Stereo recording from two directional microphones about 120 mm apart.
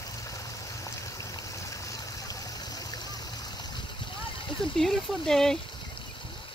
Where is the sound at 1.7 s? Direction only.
30° left (ahead or behind).